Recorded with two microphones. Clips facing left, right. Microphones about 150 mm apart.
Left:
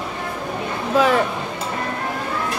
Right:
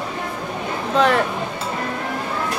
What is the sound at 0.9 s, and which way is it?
Speech, 5° left (ahead or behind).